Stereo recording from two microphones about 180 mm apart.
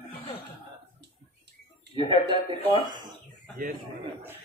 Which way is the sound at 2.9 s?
25° right (ahead or behind).